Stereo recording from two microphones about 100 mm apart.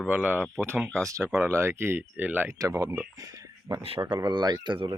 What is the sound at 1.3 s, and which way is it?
Speech, 20° right (ahead or behind).